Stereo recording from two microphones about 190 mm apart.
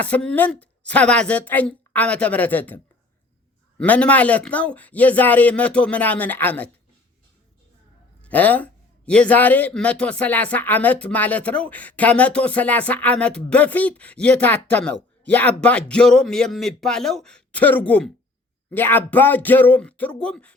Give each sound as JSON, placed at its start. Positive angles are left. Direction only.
{"t": 0.0, "sound": "speech", "side_deg": 5}
{"t": 8.2, "sound": "speech", "side_deg": 10}